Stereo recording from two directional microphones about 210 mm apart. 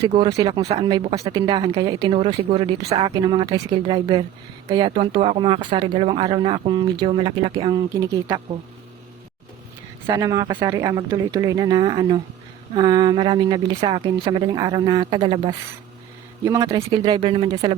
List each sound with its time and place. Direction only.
0.1 s speech: 20° right (ahead or behind)
10.1 s speech: 15° right (ahead or behind)